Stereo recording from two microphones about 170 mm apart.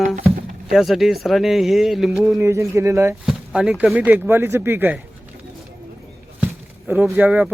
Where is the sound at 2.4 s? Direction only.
15° right (ahead or behind).